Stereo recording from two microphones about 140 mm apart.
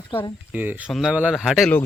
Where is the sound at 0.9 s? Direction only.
Centre (ahead or behind).